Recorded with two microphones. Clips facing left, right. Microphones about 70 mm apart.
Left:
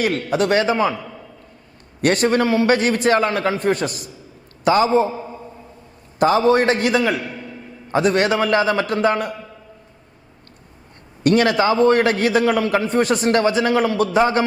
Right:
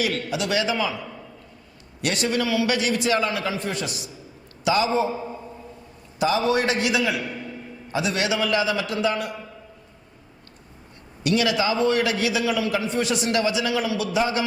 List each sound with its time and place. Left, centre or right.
0.0 s a man's voice: left
2.0 s a man's voice: left
6.1 s a man's voice: left
11.2 s a man's voice: left